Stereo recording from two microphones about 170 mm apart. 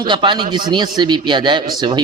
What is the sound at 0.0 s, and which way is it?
Speech, 25° right (ahead or behind).